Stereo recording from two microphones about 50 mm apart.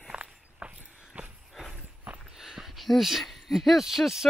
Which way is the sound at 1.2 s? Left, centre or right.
Right.